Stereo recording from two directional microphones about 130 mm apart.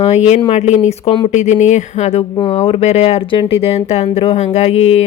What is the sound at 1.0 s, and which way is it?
Speech, 45° left (ahead or behind).